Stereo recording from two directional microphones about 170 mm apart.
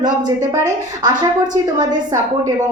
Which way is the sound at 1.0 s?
25° right (ahead or behind).